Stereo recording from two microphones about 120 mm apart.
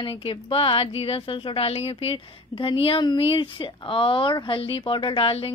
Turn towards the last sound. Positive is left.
turn(degrees=50)  # may be behind; listen again after turning